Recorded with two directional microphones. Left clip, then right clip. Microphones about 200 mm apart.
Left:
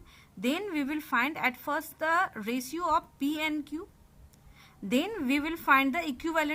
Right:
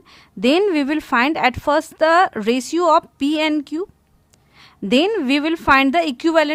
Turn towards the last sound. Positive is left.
turn(degrees=-50)  # may be behind; listen again after turning